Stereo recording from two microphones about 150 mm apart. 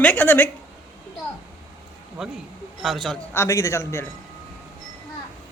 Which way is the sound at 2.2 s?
5° right (ahead or behind).